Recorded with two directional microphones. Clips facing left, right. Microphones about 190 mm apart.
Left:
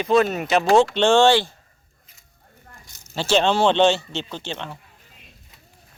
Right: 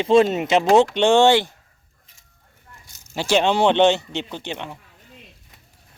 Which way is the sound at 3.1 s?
15° right (ahead or behind).